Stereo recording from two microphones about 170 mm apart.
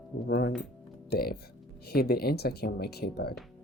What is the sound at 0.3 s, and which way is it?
Speech, 65° left (ahead or behind).